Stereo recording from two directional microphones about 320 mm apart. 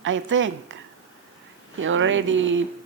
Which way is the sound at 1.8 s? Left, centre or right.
Right.